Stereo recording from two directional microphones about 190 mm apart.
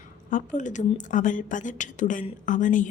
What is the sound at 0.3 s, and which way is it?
A woman's voice, 40° left (ahead or behind).